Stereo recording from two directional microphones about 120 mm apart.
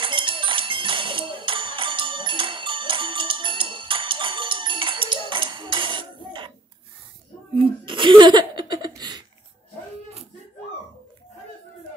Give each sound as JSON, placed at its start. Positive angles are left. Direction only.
{"t": 0.0, "sound": "music", "side_deg": -45}
{"t": 7.5, "sound": "laughter", "side_deg": -45}